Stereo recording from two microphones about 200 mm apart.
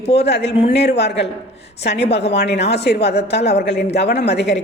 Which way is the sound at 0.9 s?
55° left (ahead or behind).